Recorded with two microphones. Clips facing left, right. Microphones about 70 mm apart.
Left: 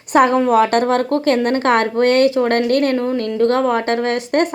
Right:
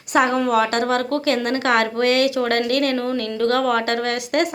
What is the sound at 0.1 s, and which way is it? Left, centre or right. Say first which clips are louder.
A woman's voice: left 5 dB; left.